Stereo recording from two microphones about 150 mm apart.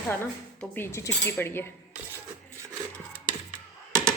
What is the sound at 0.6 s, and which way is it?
Speech, 10° left (ahead or behind).